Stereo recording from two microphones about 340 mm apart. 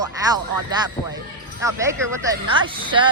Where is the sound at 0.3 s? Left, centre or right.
Centre.